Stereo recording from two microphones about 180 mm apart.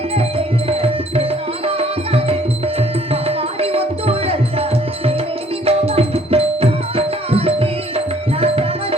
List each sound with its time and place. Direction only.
0.1 s music: 35° right (ahead or behind)